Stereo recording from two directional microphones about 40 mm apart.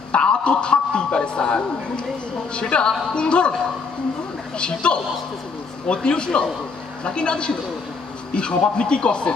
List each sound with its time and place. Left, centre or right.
0.1 s a woman's voice: left
4.6 s a man's voice: left